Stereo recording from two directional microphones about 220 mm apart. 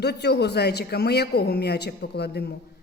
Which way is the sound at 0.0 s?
50° left (ahead or behind).